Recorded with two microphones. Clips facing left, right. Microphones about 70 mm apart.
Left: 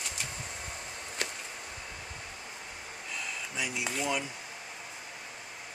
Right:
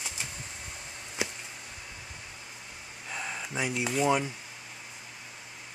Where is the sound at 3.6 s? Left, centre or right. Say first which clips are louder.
Right 4 dB; right.